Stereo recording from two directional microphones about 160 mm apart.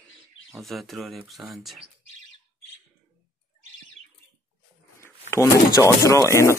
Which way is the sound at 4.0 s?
Centre (ahead or behind).